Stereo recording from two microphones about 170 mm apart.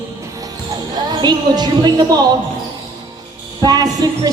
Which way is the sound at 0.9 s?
25° right (ahead or behind).